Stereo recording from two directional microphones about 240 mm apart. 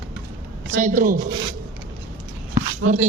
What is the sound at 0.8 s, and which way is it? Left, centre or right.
Speech, right.